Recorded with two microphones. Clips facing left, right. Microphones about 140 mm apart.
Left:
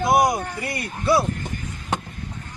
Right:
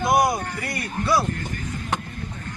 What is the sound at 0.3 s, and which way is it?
Speech, 20° left (ahead or behind).